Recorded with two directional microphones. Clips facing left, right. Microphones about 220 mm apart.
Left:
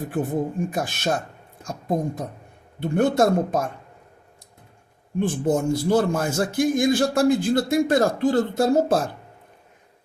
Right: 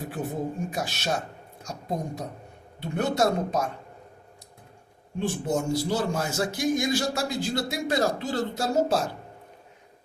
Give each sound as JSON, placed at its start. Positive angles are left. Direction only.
{"t": 0.0, "sound": "a man's voice", "side_deg": 50}
{"t": 5.2, "sound": "a man's voice", "side_deg": 50}